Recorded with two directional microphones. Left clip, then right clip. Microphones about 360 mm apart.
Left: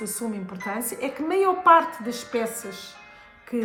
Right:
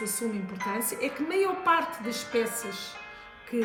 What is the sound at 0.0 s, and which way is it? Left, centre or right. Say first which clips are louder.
A woman's voice: left 1 dB; centre.